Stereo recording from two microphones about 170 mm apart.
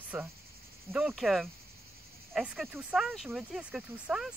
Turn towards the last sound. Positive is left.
turn(degrees=-5)  # may be behind; listen again after turning